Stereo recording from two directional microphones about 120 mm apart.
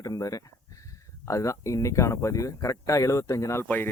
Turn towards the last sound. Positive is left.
turn(degrees=20)  # may be behind; listen again after turning